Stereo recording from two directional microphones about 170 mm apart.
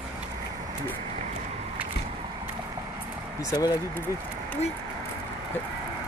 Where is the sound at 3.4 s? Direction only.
20° left (ahead or behind).